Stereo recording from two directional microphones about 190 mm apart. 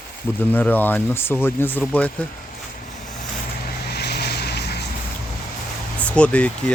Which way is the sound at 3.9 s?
60° left (ahead or behind).